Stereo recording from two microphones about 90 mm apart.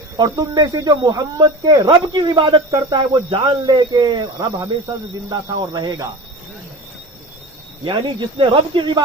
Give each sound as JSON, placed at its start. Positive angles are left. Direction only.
{"t": 0.2, "sound": "speech", "side_deg": -45}
{"t": 3.1, "sound": "speech", "side_deg": -70}
{"t": 3.6, "sound": "speech", "side_deg": -55}
{"t": 7.8, "sound": "speech", "side_deg": -60}